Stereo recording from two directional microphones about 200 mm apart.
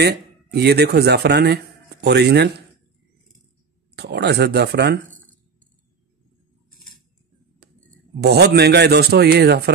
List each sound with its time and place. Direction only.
0.0 s speech: 55° right (ahead or behind)
3.9 s speech: 60° right (ahead or behind)
8.2 s speech: 55° right (ahead or behind)